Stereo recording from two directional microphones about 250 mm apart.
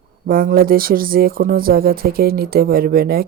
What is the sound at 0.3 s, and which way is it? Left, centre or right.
Speech, right.